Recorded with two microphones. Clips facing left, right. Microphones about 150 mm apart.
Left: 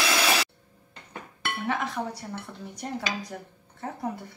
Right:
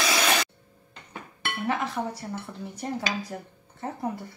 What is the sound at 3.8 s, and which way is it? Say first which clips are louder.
Speech: right 1 dB; centre (ahead or behind).